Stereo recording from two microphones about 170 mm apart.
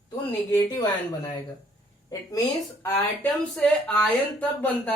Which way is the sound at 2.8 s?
10° left (ahead or behind).